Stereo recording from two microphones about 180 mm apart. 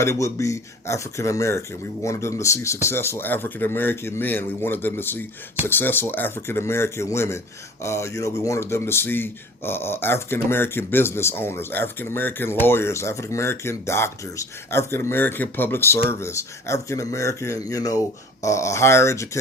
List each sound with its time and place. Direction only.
0.0 s speech: 15° left (ahead or behind)